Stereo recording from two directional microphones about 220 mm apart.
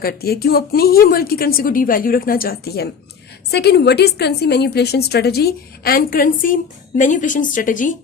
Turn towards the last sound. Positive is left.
turn(degrees=35)  # may be behind; listen again after turning